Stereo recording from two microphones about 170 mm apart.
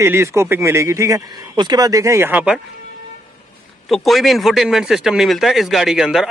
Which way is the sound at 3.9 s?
Centre (ahead or behind).